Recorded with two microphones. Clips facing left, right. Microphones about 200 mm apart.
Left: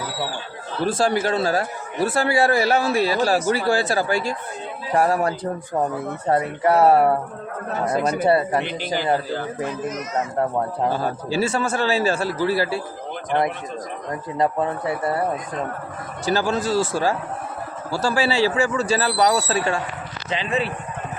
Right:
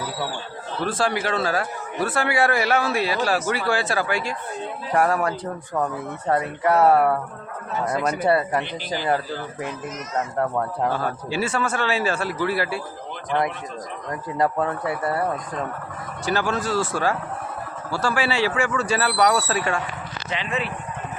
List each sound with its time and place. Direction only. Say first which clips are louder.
0.9 s a man's voice: left 4 dB; 45° left (ahead or behind); by 9.6 s 25° left (ahead or behind)
10.8 s speech: left 2 dB; 35° left (ahead or behind)
14.3 s a man's voice: left 1 dB; 20° left (ahead or behind)
16.2 s speech: left 2 dB; 40° left (ahead or behind)
16.7 s speech: left 3 dB; 5° left (ahead or behind)
18.1 s speech: left 3 dB; 40° left (ahead or behind)